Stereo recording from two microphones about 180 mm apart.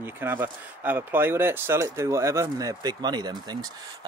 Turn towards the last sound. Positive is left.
turn(degrees=-20)  # may be behind; listen again after turning